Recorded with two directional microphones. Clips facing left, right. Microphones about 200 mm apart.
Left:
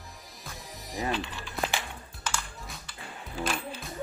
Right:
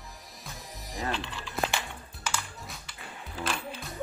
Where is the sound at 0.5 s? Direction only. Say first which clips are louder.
Left 3 dB; centre (ahead or behind).